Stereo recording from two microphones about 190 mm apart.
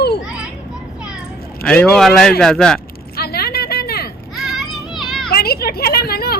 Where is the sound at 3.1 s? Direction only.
55° left (ahead or behind).